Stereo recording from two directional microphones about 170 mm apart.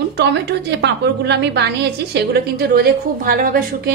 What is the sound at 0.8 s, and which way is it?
A woman's voice, 80° right.